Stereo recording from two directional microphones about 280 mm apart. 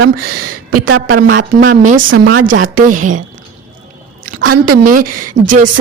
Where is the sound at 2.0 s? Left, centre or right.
Right.